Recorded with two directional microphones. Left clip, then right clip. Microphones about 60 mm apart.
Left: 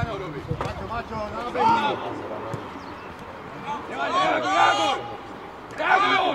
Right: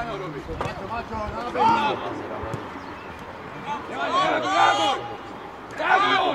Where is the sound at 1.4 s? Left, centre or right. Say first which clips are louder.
Right 1 dB; centre.